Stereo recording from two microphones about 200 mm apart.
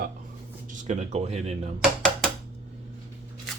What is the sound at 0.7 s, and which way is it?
Speech, 40° right (ahead or behind).